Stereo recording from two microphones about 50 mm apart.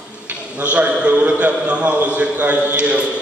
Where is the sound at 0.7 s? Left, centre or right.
Right.